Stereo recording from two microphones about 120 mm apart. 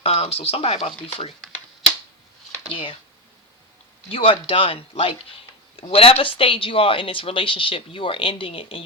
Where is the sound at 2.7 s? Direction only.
50° left (ahead or behind).